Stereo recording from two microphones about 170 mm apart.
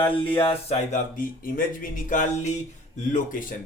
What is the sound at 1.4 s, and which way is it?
Speech, 55° left (ahead or behind).